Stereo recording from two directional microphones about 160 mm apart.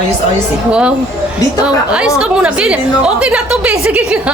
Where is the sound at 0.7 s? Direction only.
5° right (ahead or behind).